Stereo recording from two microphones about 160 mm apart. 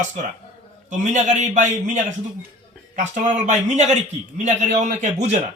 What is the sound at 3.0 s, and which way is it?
A man's voice, 50° right (ahead or behind).